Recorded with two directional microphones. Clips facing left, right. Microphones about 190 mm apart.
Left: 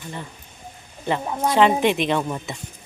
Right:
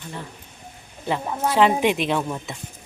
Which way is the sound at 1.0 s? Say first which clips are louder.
Left 1 dB; 5° right (ahead or behind).